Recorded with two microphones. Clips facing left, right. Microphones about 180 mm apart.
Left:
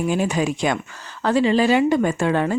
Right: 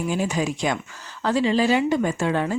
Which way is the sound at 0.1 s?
60° left (ahead or behind).